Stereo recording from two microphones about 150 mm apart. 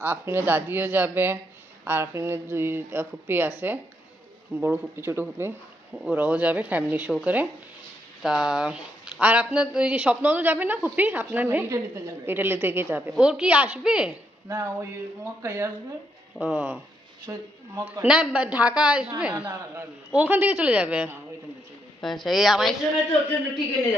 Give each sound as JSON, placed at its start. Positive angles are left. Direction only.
{"t": 0.0, "sound": "speech", "side_deg": -15}
{"t": 14.4, "sound": "speech", "side_deg": -20}